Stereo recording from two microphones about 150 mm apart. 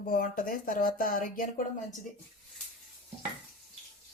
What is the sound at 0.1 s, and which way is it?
Speech, 65° left (ahead or behind).